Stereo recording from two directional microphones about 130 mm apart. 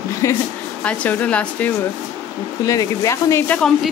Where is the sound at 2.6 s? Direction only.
25° left (ahead or behind).